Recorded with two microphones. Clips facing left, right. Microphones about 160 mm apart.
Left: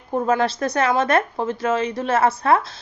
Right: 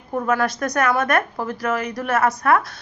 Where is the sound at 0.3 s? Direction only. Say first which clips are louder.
Even; 30° left (ahead or behind).